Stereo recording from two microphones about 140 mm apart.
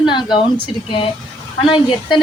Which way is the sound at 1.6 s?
35° left (ahead or behind).